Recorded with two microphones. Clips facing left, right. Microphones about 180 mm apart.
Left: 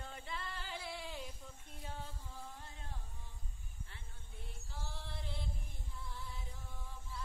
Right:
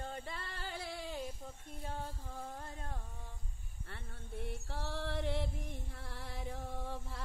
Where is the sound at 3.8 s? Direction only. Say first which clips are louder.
Right 8 dB; 60° right (ahead or behind); by 7.2 s 75° right (ahead or behind).